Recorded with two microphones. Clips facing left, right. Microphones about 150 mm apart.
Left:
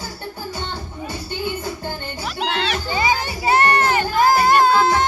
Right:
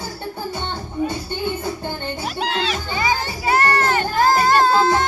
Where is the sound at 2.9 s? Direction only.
20° left (ahead or behind).